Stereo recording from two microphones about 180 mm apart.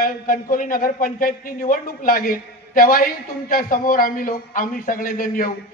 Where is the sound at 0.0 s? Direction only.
50° left (ahead or behind).